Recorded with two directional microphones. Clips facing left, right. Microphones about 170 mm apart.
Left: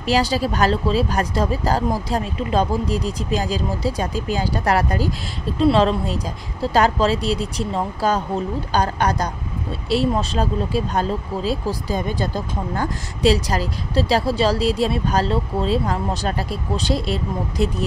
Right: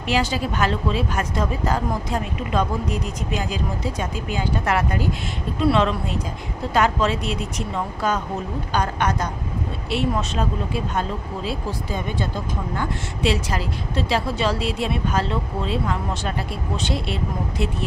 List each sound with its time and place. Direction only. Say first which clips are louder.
0.0 s speech: left 3 dB; 35° left (ahead or behind)